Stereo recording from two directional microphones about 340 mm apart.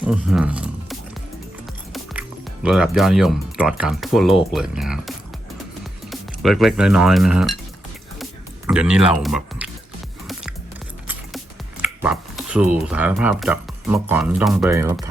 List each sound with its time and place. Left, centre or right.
0.0 s a sound: centre
2.6 s speech: centre
8.2 s music: centre
11.8 s speech: centre